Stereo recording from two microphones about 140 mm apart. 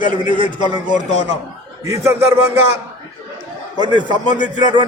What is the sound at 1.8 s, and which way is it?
Speech, 20° right (ahead or behind).